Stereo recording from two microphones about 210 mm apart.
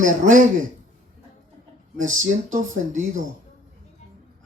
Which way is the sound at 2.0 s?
35° right (ahead or behind).